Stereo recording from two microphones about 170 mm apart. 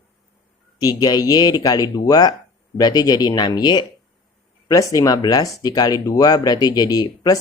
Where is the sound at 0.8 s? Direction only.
20° left (ahead or behind).